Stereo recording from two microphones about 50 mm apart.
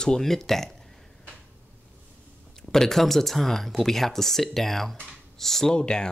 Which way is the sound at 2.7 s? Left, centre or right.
Centre.